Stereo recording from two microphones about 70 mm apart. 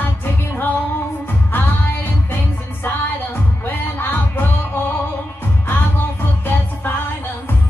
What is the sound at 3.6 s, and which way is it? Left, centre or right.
Music, left.